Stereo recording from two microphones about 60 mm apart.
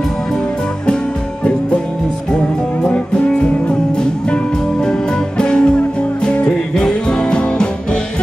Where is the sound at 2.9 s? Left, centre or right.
Left.